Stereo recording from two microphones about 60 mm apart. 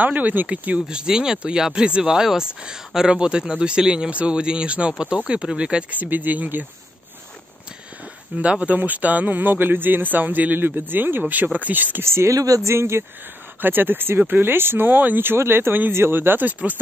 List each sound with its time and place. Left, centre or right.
0.0 s speech: right
0.7 s speech: centre
5.9 s speech: right
8.4 s speech: right
12.0 s speech: right
12.4 s speech: right
12.6 s speech: right
13.6 s speech: right